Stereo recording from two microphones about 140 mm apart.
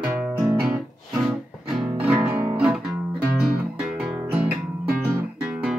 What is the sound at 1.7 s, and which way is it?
Music, 5° right (ahead or behind).